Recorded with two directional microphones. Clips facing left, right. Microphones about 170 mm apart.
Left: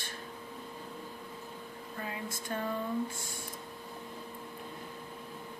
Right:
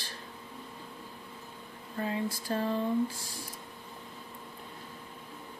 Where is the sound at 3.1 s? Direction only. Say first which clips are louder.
Left 1 dB; 25° left (ahead or behind).